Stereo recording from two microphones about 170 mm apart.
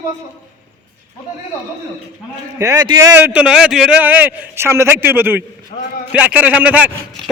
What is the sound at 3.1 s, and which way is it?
A man's voice, 10° right (ahead or behind).